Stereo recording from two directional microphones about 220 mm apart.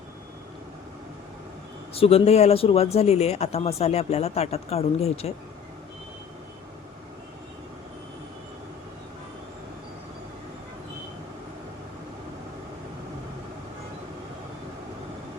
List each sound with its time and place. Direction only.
1.9 s speech: 25° left (ahead or behind)